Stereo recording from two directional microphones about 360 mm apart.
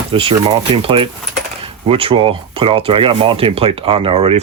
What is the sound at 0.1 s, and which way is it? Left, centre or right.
Speech, centre.